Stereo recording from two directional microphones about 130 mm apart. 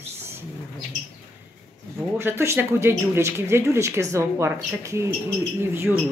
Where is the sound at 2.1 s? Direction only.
20° right (ahead or behind).